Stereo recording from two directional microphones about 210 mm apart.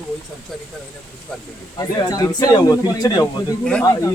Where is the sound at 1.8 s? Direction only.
20° left (ahead or behind).